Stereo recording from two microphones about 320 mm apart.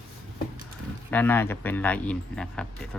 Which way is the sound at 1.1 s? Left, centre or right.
Centre.